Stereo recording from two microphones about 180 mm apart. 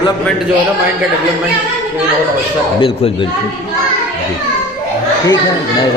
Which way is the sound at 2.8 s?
30° left (ahead or behind).